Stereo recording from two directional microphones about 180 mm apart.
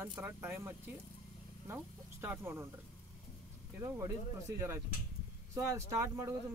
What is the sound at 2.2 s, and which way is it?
Speech, 15° right (ahead or behind).